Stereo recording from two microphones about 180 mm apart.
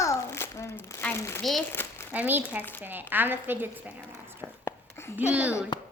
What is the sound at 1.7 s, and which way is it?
Crumpling, 10° left (ahead or behind).